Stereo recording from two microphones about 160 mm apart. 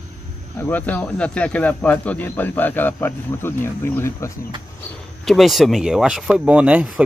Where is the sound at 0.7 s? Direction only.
10° left (ahead or behind).